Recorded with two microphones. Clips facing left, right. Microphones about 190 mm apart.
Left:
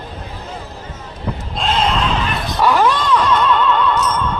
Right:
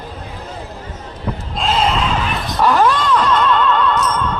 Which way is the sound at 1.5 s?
5° right (ahead or behind).